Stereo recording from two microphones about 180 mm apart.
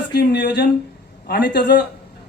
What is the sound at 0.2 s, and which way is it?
Speech, 70° left (ahead or behind).